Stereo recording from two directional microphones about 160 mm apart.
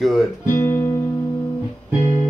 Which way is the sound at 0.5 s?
15° left (ahead or behind).